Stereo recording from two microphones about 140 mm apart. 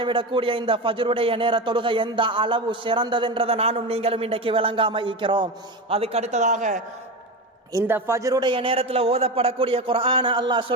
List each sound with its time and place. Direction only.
0.0 s a man's voice: 35° right (ahead or behind); by 6.8 s 60° right (ahead or behind)
7.7 s a man's voice: 20° right (ahead or behind); by 10.8 s 35° right (ahead or behind)